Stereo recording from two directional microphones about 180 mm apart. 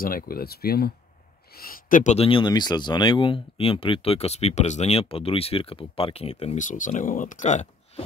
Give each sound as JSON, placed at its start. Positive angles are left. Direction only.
{"t": 0.0, "sound": "speech", "side_deg": 55}